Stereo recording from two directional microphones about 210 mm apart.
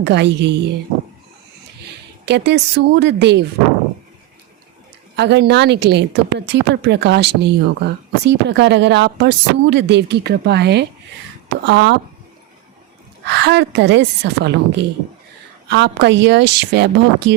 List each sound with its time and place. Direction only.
0.0 s speech: 55° right (ahead or behind)
1.8 s speech: 55° right (ahead or behind)
5.1 s speech: 55° right (ahead or behind)
13.2 s speech: 55° right (ahead or behind)